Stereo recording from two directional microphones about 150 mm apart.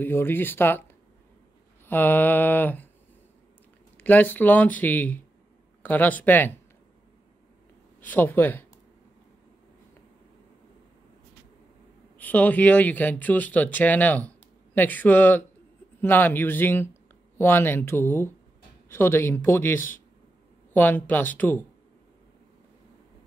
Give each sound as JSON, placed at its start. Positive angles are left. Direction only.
{"t": 0.0, "sound": "speech", "side_deg": 15}
{"t": 1.9, "sound": "speech", "side_deg": 10}
{"t": 4.0, "sound": "speech", "side_deg": 10}
{"t": 8.0, "sound": "speech", "side_deg": 10}
{"t": 12.2, "sound": "speech", "side_deg": 10}